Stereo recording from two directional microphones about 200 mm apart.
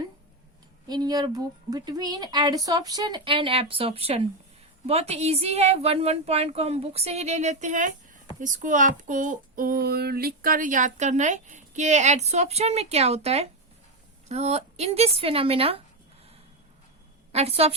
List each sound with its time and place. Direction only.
0.9 s a woman's voice: 20° right (ahead or behind)
17.3 s speech: 30° right (ahead or behind)